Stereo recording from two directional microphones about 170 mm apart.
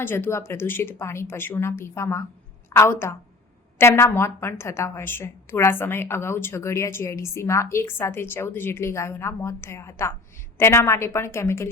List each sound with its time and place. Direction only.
0.0 s a woman's voice: 15° left (ahead or behind)